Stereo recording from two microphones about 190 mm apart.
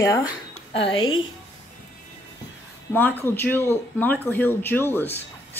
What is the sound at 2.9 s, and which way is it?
Speech, 10° left (ahead or behind).